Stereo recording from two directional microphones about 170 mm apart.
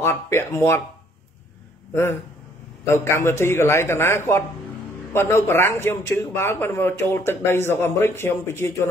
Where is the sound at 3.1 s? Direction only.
15° left (ahead or behind).